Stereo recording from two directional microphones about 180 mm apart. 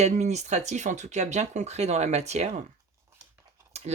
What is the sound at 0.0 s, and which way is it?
Speech, 40° right (ahead or behind).